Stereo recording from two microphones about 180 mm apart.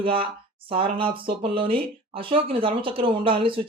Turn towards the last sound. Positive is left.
turn(degrees=-30)  # may be behind; listen again after turning